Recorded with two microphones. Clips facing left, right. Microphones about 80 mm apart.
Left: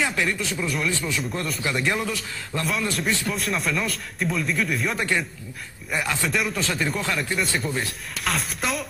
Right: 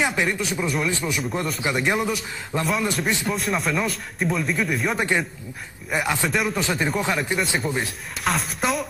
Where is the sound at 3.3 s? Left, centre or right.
Centre.